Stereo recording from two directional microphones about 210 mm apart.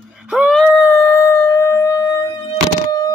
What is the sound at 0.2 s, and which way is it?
Howl, 5° right (ahead or behind).